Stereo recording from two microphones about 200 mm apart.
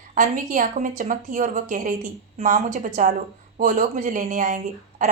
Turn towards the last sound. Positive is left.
turn(degrees=-40)  # may be behind; listen again after turning